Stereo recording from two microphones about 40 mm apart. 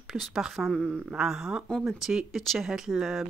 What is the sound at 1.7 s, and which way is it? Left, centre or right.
Speech, centre.